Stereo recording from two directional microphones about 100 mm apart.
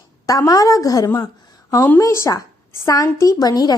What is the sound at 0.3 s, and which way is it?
A woman's voice, 35° left (ahead or behind).